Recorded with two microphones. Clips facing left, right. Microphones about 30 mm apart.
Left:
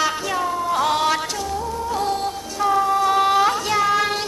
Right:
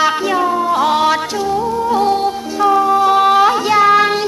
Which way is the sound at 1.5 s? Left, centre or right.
Right.